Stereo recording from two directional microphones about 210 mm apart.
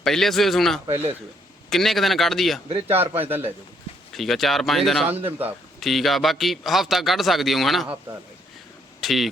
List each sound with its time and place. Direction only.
0.0 s a man's voice: centre (ahead or behind)
2.6 s speech: 30° right (ahead or behind)
2.9 s speech: 10° right (ahead or behind)
4.1 s a man's voice: centre (ahead or behind)
9.0 s speech: centre (ahead or behind)